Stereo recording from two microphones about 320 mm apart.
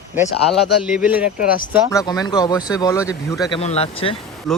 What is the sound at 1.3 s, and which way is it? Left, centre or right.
Speech, left.